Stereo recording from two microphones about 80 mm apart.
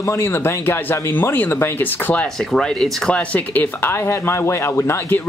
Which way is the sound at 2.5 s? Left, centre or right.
Centre.